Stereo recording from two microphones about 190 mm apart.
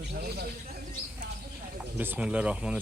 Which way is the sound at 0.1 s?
55° right (ahead or behind).